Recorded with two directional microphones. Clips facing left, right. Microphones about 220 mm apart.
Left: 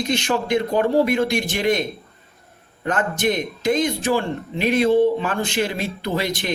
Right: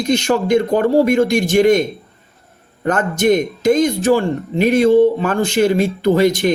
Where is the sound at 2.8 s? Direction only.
45° right (ahead or behind).